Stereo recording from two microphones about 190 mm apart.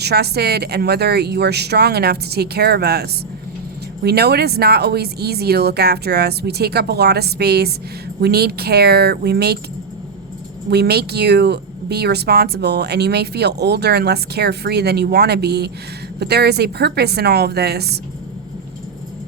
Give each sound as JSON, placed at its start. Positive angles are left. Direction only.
{"t": 0.0, "sound": "speech", "side_deg": -60}
{"t": 10.7, "sound": "speech", "side_deg": -60}